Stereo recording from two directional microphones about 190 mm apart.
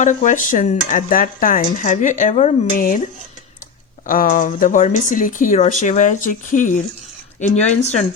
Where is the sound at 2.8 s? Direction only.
45° left (ahead or behind).